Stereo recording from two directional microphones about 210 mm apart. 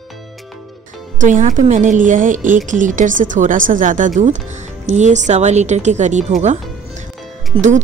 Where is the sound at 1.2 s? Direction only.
35° right (ahead or behind).